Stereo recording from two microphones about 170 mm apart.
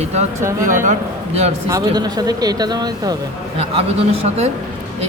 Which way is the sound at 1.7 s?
20° right (ahead or behind).